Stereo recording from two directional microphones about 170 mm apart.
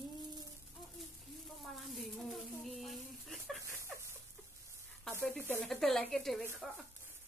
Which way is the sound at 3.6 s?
15° right (ahead or behind).